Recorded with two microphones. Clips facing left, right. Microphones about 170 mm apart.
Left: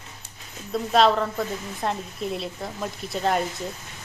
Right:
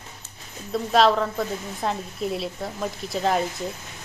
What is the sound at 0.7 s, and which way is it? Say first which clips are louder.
Speech: even; centre (ahead or behind).